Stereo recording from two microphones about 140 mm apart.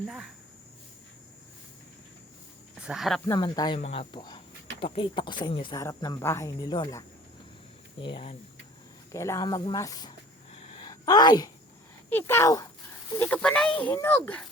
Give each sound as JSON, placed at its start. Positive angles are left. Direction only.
{"t": 0.1, "sound": "speech", "side_deg": -5}
{"t": 2.7, "sound": "speech", "side_deg": -5}
{"t": 3.3, "sound": "speech", "side_deg": 30}
{"t": 3.8, "sound": "speech", "side_deg": 50}
{"t": 4.1, "sound": "speech", "side_deg": 30}
{"t": 5.7, "sound": "speech", "side_deg": 25}
{"t": 7.9, "sound": "speech", "side_deg": 40}
{"t": 9.1, "sound": "speech", "side_deg": 20}
{"t": 10.5, "sound": "a sound", "side_deg": 45}
{"t": 10.8, "sound": "a woman's voice", "side_deg": 30}
{"t": 12.1, "sound": "speech", "side_deg": 20}
{"t": 13.1, "sound": "speech", "side_deg": 10}